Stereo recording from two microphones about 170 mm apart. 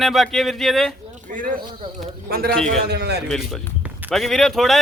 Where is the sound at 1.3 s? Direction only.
50° right (ahead or behind).